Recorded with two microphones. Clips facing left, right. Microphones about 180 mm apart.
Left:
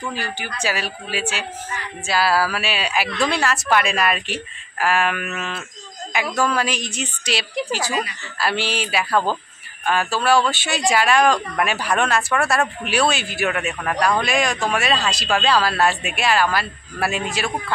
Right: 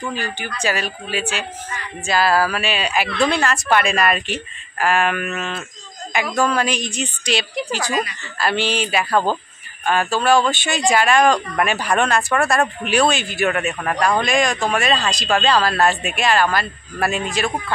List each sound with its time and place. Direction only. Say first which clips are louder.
0.1 s speech: right 2 dB; 5° left (ahead or behind)